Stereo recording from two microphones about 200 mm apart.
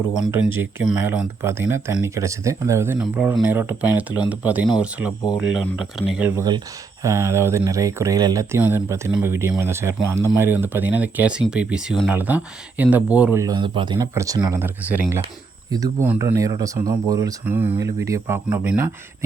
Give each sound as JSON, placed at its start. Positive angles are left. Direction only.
{"t": 0.1, "sound": "speech", "side_deg": -5}